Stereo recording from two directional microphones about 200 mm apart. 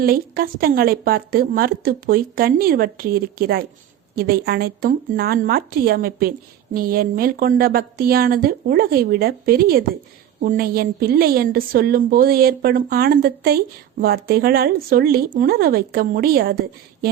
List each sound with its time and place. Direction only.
0.0 s a woman's voice: 50° right (ahead or behind)